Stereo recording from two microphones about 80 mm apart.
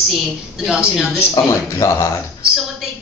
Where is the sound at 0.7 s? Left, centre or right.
Centre.